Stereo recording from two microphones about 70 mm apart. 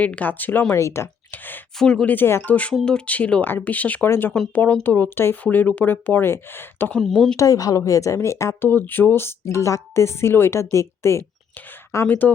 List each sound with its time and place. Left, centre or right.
0.0 s speech: left
0.7 s a woman's voice: left
1.3 s speech: left
1.8 s speech: centre
2.0 s a woman's voice: left
6.9 s speech: centre
7.3 s a woman's voice: left
8.6 s a woman's voice: left
12.0 s speech: left